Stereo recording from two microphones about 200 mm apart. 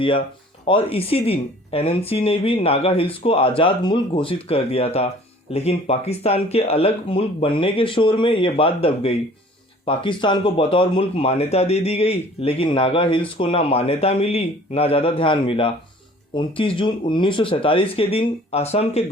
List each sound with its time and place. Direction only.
0.7 s speech: 30° left (ahead or behind)